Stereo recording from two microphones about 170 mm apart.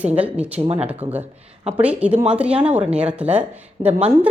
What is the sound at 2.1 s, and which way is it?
Speech, 40° right (ahead or behind).